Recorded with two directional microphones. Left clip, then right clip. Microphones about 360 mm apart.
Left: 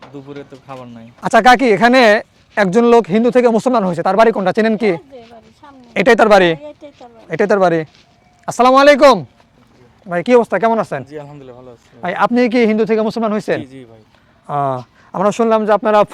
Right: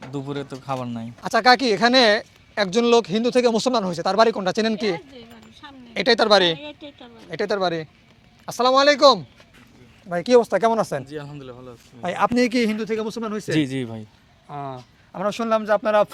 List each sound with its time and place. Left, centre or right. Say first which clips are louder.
0.1 s speech: right 3 dB; right
1.2 s speech: left 7 dB; left
1.5 s speech: left 7 dB; left
10.1 s speech: left 5 dB; left
11.0 s speech: left 4 dB; centre
12.0 s speech: left 6 dB; centre
12.9 s speech: left 10 dB; left
15.1 s speech: left 9 dB; left